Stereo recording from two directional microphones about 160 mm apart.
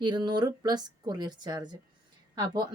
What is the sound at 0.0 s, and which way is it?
Speech, 25° right (ahead or behind).